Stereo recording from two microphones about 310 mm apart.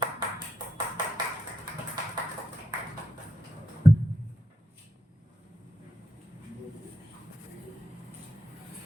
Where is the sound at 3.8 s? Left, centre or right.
Centre.